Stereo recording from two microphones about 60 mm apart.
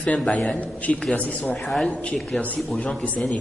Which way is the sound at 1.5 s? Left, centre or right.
Centre.